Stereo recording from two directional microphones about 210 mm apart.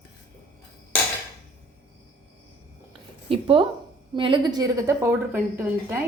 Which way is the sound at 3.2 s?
25° right (ahead or behind).